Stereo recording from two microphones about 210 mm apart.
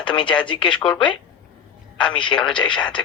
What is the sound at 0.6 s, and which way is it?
Speech, 5° left (ahead or behind).